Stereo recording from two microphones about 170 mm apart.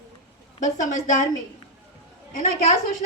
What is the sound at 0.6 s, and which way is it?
Speech, 50° left (ahead or behind).